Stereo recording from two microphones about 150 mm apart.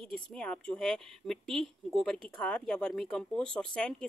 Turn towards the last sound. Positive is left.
turn(degrees=5)  # may be behind; listen again after turning